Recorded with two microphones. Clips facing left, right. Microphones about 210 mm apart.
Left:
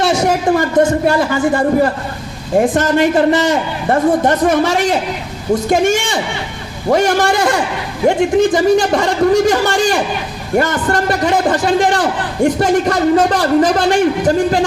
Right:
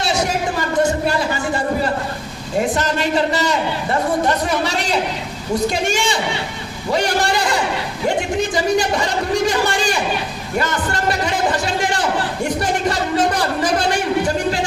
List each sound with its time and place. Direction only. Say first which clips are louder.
0.0 s a woman's voice: left 6 dB; 50° left (ahead or behind)